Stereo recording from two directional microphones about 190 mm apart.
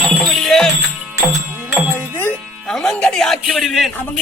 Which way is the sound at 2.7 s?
5° left (ahead or behind).